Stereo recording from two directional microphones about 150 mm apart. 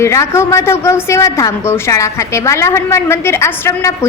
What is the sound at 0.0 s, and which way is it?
A woman's voice, 20° left (ahead or behind).